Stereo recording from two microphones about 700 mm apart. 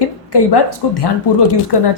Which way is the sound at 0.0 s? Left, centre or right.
Left.